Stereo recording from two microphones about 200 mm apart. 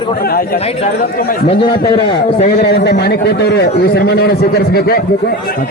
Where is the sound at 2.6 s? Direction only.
55° left (ahead or behind).